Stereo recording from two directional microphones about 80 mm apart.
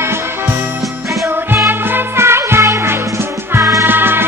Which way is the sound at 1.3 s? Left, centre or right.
Right.